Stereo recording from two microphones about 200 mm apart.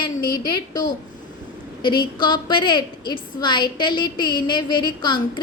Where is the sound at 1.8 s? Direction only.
20° left (ahead or behind).